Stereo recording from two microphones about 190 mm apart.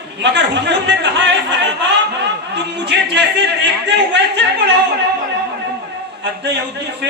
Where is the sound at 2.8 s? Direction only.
65° right (ahead or behind).